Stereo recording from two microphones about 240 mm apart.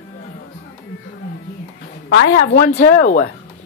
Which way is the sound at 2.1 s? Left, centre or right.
Left.